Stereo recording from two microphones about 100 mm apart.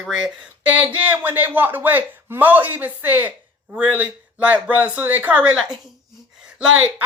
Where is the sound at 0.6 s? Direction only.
15° right (ahead or behind).